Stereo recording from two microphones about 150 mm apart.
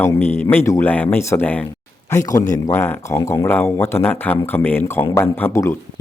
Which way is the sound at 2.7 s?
15° left (ahead or behind).